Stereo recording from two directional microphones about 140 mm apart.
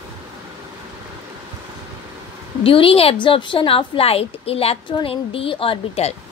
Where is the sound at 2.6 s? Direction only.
40° left (ahead or behind).